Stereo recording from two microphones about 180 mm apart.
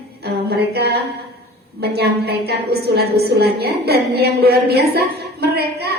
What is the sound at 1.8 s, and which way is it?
A woman's voice, 65° right (ahead or behind).